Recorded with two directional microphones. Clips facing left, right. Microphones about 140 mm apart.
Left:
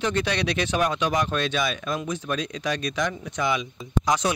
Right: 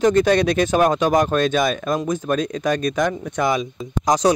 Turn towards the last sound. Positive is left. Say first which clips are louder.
# right 7 dB
turn(degrees=-40)  # may be behind; listen again after turning